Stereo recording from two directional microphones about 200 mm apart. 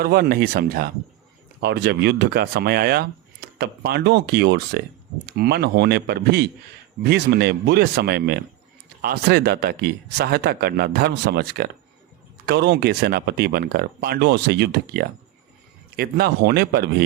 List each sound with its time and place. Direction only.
0.0 s speech: 50° right (ahead or behind)